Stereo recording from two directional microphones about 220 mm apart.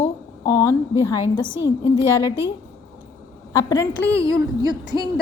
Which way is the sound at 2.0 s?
10° right (ahead or behind).